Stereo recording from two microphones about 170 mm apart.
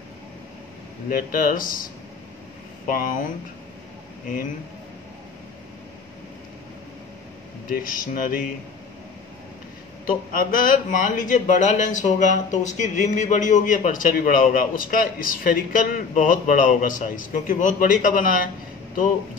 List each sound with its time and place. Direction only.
1.1 s speech: 55° left (ahead or behind)
2.9 s a man's voice: 50° left (ahead or behind)
7.7 s speech: 55° left (ahead or behind)
10.0 s a man's voice: 55° left (ahead or behind)